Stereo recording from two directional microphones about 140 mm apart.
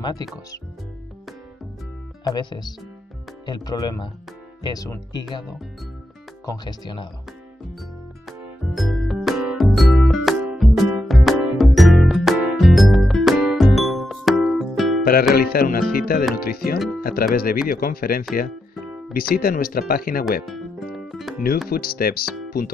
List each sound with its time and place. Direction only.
0.0 s speech: 25° left (ahead or behind)
2.2 s speech: 30° left (ahead or behind)
6.4 s speech: 30° left (ahead or behind)
8.3 s music: centre (ahead or behind)
15.3 s speech: 90° left
20.4 s music: centre (ahead or behind)
21.6 s speech: 90° left